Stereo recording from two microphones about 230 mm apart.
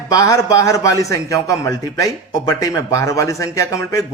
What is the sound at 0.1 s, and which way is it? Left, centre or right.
A man's voice, centre.